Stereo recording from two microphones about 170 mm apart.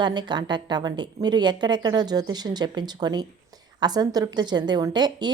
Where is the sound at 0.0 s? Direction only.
25° right (ahead or behind).